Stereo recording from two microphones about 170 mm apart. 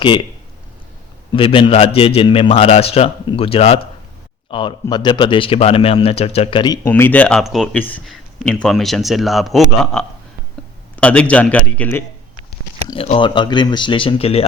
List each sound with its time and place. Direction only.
1.3 s a man's voice: 30° left (ahead or behind)
6.8 s a man's voice: 15° left (ahead or behind)
12.9 s speech: 30° left (ahead or behind)